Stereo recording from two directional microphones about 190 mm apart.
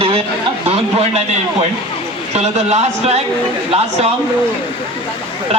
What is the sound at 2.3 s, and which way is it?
Speech, 35° right (ahead or behind).